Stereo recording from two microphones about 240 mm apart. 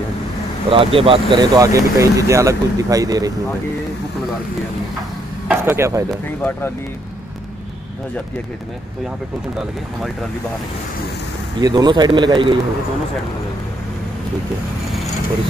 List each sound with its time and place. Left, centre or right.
0.7 s speech: right
5.5 s speech: centre
6.0 s speech: centre
11.6 s speech: centre